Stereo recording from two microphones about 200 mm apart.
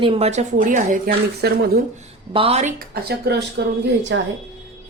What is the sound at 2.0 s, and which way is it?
Speech, 30° right (ahead or behind).